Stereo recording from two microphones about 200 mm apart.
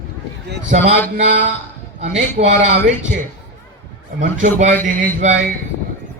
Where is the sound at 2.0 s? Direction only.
35° right (ahead or behind).